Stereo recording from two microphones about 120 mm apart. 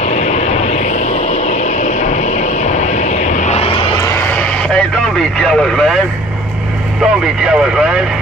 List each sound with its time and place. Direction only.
0.1 s vehicle: 60° left (ahead or behind)
2.7 s vehicle: 80° left; by 3.8 s 55° left (ahead or behind)
5.4 s speech: 5° left (ahead or behind)
7.0 s speech: 5° right (ahead or behind)